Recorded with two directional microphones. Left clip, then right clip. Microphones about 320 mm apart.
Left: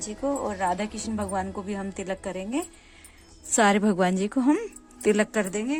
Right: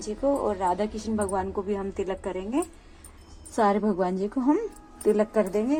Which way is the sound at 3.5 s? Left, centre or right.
Left.